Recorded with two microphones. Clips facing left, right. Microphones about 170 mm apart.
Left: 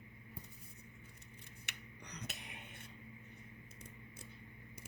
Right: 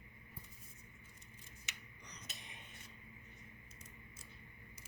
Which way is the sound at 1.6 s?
65° left (ahead or behind).